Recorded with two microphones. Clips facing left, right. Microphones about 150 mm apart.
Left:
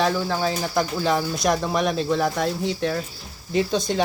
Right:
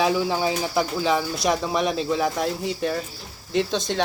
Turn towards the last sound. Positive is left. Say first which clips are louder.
# left 1 dB
turn(degrees=5)  # may be behind; listen again after turning